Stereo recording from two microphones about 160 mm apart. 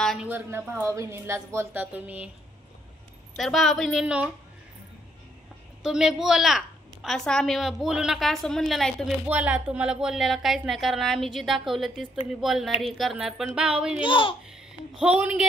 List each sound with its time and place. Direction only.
0.0 s a sound: centre (ahead or behind)
0.3 s speech: 15° right (ahead or behind)
3.3 s a woman's voice: centre (ahead or behind)
5.9 s a woman's voice: 5° right (ahead or behind)
14.0 s a child's voice: 30° left (ahead or behind)
14.5 s speech: 5° right (ahead or behind)